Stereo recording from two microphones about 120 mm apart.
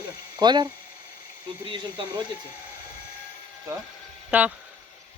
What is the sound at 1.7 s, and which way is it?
Speech, 40° right (ahead or behind).